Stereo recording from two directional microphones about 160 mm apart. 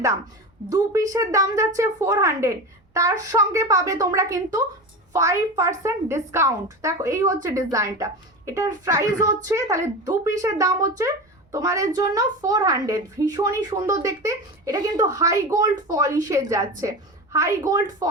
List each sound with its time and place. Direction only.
0.7 s a woman's voice: 20° right (ahead or behind)